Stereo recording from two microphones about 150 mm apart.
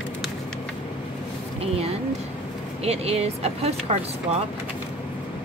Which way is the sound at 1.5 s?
40° right (ahead or behind).